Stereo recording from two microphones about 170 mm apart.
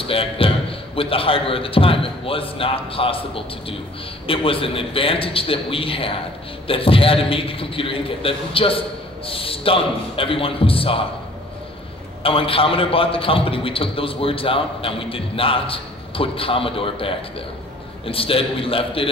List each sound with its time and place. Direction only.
0.1 s a man's voice: 30° left (ahead or behind)
12.2 s a man's voice: 30° left (ahead or behind)